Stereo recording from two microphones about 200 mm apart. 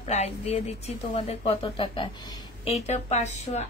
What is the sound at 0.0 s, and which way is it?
Speech, 30° left (ahead or behind).